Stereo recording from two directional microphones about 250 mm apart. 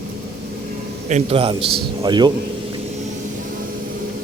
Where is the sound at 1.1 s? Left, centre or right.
Right.